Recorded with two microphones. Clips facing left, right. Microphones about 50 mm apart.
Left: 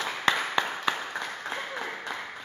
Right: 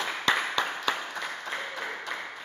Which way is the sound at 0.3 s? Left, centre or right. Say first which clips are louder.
Even; left.